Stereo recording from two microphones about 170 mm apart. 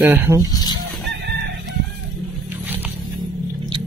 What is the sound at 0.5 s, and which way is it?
Speech, 25° left (ahead or behind).